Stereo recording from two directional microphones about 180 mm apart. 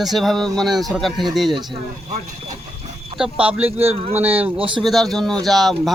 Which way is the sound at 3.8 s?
35° right (ahead or behind).